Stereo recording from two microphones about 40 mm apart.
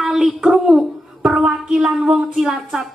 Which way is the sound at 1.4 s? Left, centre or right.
Centre.